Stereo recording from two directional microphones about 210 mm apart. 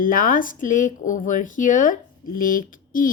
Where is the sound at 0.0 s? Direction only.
40° left (ahead or behind).